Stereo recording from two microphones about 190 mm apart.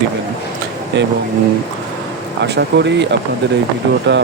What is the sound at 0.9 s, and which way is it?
Speech, 70° right (ahead or behind).